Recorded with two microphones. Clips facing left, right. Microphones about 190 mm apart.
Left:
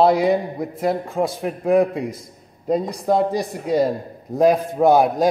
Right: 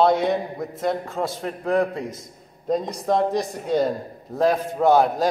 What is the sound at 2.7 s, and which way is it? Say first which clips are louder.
A man's voice: left 3 dB; centre (ahead or behind).